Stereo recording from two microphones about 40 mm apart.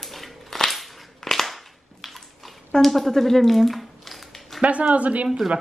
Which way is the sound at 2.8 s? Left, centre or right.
Centre.